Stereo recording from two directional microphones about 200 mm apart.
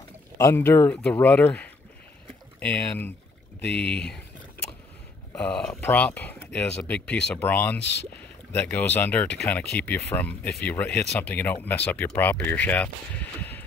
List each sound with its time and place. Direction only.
0.4 s speech: 10° left (ahead or behind)
5.3 s speech: 5° left (ahead or behind)
13.4 s vehicle: 10° left (ahead or behind)